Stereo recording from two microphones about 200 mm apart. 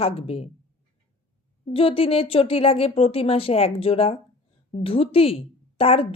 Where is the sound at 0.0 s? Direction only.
30° left (ahead or behind).